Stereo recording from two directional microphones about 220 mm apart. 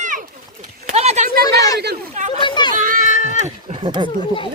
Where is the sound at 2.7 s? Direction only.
35° right (ahead or behind); by 4.1 s 20° right (ahead or behind).